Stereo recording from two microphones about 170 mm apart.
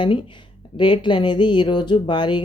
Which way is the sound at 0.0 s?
30° left (ahead or behind).